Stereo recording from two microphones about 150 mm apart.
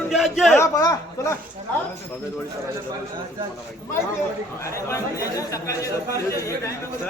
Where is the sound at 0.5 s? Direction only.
20° left (ahead or behind).